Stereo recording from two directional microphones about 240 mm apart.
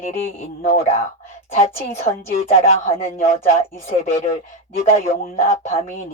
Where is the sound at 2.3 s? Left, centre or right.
Left.